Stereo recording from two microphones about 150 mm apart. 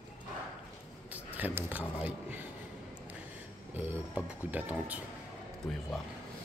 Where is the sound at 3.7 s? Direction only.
15° right (ahead or behind).